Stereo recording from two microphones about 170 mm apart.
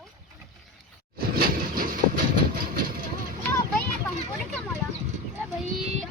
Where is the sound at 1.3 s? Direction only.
60° right (ahead or behind).